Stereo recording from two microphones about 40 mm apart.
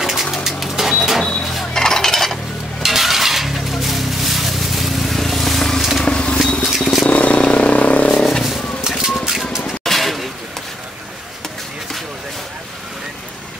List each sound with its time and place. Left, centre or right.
0.0 s a sound: centre
1.7 s cutlery: centre
2.8 s a sound: centre
5.8 s vehicle: centre
6.0 s vehicle: left
6.7 s vehicle: centre
7.1 s vehicle: left
8.5 s vehicle: centre
9.2 s music: centre
9.8 s a sound: centre